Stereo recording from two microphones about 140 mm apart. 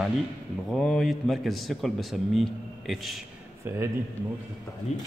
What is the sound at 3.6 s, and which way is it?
Speech, 20° right (ahead or behind).